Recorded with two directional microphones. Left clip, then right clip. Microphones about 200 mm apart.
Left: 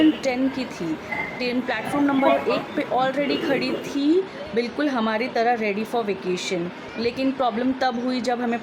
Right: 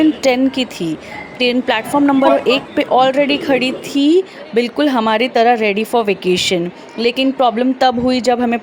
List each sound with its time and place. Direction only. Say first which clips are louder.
0.2 s a woman's voice: right 10 dB; 40° right (ahead or behind)